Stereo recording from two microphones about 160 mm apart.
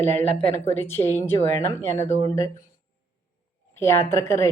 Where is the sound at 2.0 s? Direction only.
45° left (ahead or behind).